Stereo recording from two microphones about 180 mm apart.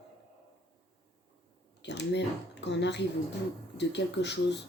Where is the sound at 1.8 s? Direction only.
75° left (ahead or behind).